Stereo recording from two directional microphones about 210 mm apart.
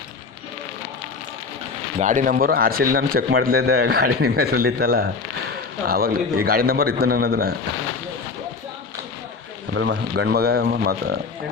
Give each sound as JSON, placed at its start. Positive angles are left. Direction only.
{"t": 2.0, "sound": "a man's voice", "side_deg": -35}
{"t": 9.7, "sound": "a man's voice", "side_deg": -60}